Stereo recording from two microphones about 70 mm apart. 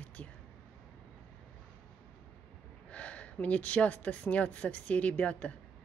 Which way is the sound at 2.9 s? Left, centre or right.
Centre.